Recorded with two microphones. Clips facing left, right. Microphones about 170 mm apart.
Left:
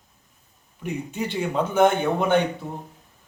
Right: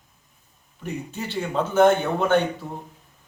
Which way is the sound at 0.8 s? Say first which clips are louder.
Left 3 dB; 15° left (ahead or behind).